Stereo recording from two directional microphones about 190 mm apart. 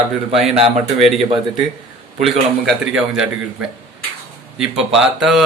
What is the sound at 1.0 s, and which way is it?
Speech, centre (ahead or behind).